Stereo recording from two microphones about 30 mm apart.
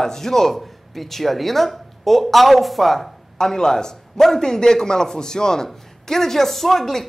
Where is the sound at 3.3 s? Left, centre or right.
Left.